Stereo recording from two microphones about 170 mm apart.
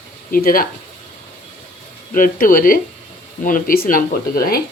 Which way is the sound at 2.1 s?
55° left (ahead or behind).